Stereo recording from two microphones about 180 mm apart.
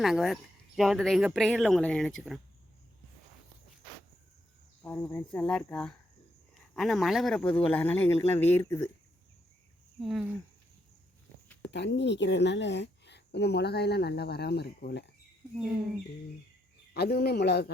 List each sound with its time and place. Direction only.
0.0 s speech: centre (ahead or behind)
4.8 s speech: 10° left (ahead or behind)
10.0 s speech: centre (ahead or behind)
11.7 s a woman's voice: 75° left (ahead or behind)
16.9 s speech: 60° left (ahead or behind)